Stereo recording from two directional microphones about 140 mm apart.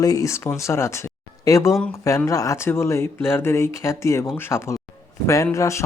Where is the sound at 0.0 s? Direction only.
25° left (ahead or behind).